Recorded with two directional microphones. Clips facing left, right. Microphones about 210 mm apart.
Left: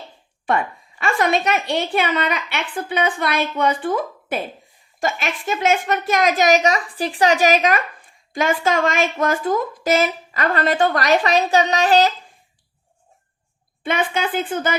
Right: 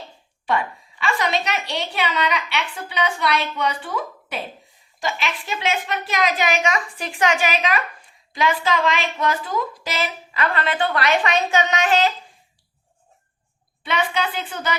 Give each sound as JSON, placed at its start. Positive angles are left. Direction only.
{"t": 0.4, "sound": "a woman's voice", "side_deg": 50}
{"t": 13.8, "sound": "a woman's voice", "side_deg": 50}